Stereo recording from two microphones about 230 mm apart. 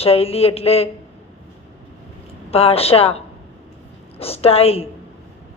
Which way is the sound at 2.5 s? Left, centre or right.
Left.